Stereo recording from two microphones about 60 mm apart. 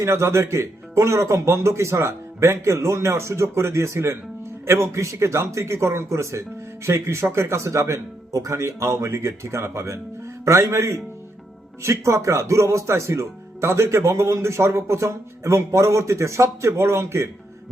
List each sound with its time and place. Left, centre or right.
0.0 s a man's voice: right